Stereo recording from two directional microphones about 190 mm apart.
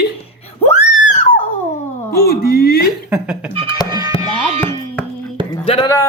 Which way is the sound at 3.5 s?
25° right (ahead or behind).